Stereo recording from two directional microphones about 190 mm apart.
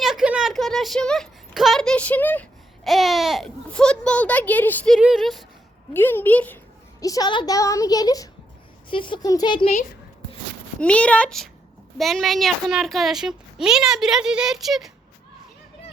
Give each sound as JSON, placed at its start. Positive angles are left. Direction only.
{"t": 0.0, "sound": "a child's voice", "side_deg": 0}
{"t": 4.9, "sound": "a child's voice", "side_deg": -5}
{"t": 5.9, "sound": "a woman's voice", "side_deg": 10}
{"t": 10.8, "sound": "a child's voice", "side_deg": 5}